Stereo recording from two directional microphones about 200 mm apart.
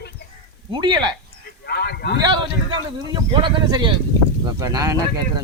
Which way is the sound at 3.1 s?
25° right (ahead or behind).